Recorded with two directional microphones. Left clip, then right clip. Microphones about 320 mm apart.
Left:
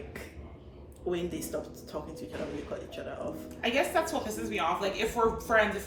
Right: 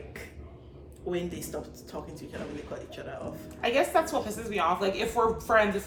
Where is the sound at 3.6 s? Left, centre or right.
Centre.